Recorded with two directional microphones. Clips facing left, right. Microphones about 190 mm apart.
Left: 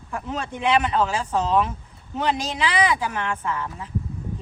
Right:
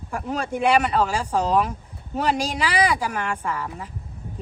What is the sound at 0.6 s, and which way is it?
Speech, 10° right (ahead or behind).